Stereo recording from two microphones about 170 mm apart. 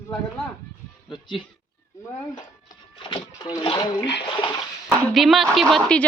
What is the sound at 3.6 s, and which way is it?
Speech, 30° left (ahead or behind).